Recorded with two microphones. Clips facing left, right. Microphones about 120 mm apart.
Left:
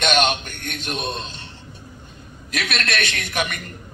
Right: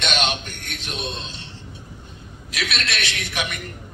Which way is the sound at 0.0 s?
45° left (ahead or behind).